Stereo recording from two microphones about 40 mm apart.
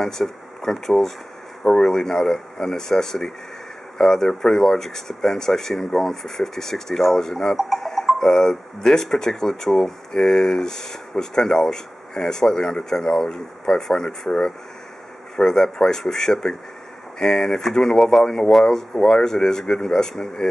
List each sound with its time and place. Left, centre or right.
0.0 s speech: centre
7.7 s cowbell: centre
8.2 s speech: centre